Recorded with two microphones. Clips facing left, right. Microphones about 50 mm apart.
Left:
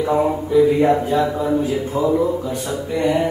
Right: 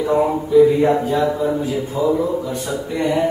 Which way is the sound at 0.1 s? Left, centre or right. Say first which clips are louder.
Right 3 dB; centre.